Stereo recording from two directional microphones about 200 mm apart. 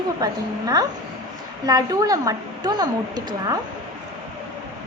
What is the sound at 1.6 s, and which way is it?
A woman's voice, 20° right (ahead or behind).